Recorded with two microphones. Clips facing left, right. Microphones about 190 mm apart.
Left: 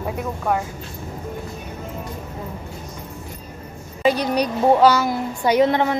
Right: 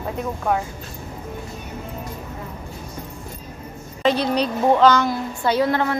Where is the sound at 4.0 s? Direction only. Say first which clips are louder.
Left 1 dB; 10° left (ahead or behind).